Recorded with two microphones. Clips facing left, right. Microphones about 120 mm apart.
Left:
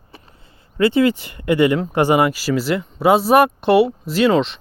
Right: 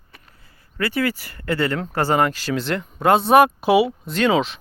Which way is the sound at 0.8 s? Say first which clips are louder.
Left 7 dB; 20° left (ahead or behind).